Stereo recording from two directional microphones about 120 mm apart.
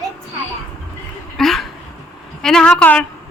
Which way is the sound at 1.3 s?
5° left (ahead or behind).